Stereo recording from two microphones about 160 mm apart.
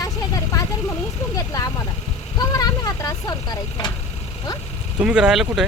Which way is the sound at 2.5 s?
20° left (ahead or behind).